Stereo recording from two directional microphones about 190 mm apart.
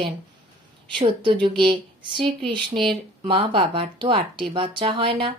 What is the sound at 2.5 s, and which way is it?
Speech, 25° right (ahead or behind).